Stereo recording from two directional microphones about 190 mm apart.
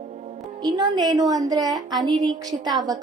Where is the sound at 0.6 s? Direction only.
20° right (ahead or behind).